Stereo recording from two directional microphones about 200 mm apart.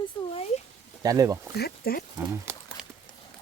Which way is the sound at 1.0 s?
15° right (ahead or behind).